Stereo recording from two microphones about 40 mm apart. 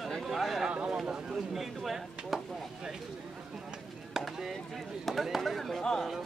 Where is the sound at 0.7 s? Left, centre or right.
Right.